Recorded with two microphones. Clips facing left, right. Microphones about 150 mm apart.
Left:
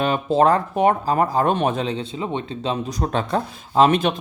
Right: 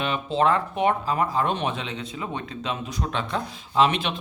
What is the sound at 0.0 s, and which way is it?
Speech, 40° left (ahead or behind).